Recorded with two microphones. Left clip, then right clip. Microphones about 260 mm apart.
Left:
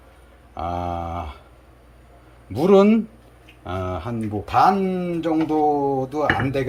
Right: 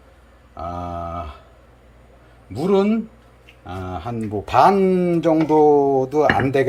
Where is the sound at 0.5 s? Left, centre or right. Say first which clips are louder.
Left 2 dB; centre.